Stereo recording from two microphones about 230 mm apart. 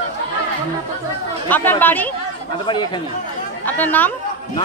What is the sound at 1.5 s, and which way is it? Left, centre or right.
Speech, centre.